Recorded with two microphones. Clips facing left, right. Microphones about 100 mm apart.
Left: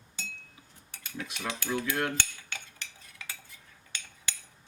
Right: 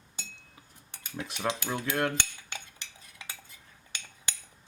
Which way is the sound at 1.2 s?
25° right (ahead or behind).